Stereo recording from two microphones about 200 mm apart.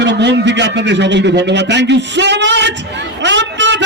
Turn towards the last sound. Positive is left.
turn(degrees=-65)  # may be behind; listen again after turning